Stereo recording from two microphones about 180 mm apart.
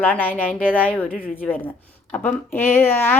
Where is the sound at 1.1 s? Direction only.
55° left (ahead or behind).